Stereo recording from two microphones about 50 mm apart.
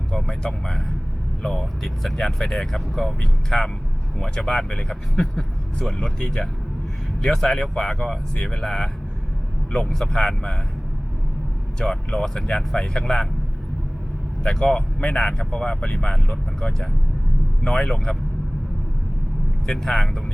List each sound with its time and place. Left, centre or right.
0.3 s speech: centre
10.2 s speech: centre
11.8 s speech: centre
14.4 s speech: centre
19.6 s speech: centre